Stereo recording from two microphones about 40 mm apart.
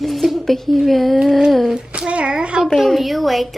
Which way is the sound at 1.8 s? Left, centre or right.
Right.